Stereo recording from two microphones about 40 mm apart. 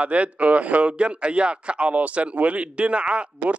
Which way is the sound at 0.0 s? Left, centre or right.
Right.